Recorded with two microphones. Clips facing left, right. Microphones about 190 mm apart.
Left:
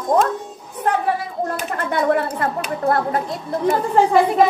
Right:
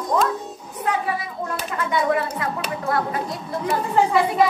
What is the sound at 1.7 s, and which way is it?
A woman's voice, 60° left (ahead or behind).